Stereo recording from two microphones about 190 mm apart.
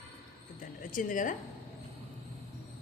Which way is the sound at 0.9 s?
45° left (ahead or behind).